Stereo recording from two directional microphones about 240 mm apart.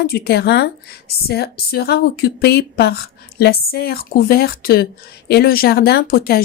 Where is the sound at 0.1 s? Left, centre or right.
Left.